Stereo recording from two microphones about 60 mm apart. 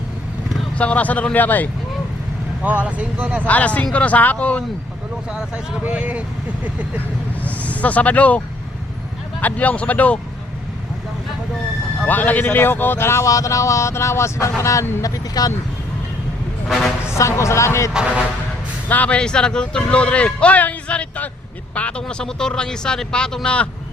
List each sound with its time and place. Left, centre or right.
0.8 s speech: left
2.6 s speech: right
3.4 s speech: left
5.8 s speech: right
7.4 s speech: left
9.4 s speech: left
12.0 s speech: left
13.2 s speech: left
15.0 s speech: left
16.6 s speech: centre
17.2 s speech: left
18.9 s speech: left